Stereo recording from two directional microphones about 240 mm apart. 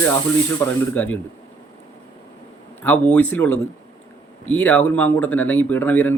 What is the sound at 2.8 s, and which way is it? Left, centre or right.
Speech, centre.